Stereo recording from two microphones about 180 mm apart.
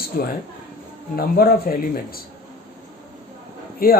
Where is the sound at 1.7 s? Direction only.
50° left (ahead or behind).